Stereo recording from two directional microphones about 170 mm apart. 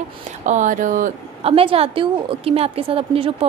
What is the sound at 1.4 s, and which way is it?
A woman's voice, 35° right (ahead or behind).